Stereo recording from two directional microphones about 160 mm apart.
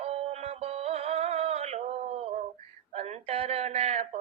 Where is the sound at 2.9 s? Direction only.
40° right (ahead or behind).